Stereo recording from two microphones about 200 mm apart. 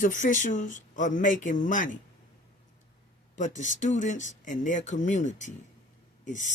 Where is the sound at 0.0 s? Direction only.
40° left (ahead or behind).